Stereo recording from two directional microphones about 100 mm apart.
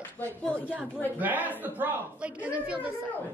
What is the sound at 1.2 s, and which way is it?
A man's voice, 15° right (ahead or behind).